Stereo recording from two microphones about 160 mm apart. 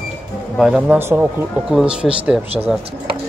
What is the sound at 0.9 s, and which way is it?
A man's voice, 15° right (ahead or behind).